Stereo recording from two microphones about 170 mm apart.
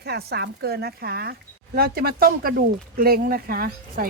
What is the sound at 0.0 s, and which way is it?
Speech, 70° right (ahead or behind).